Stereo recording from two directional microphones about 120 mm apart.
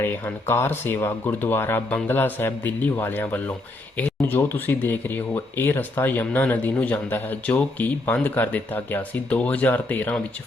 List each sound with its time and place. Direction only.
0.0 s speech: 15° left (ahead or behind)